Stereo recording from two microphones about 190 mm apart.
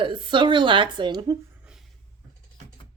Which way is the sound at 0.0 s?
25° right (ahead or behind).